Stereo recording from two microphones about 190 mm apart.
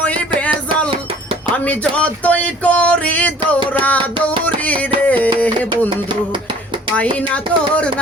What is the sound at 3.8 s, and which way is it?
Music, 10° left (ahead or behind).